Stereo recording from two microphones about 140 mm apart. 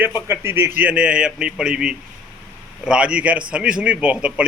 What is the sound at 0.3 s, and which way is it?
A man's voice, 15° right (ahead or behind).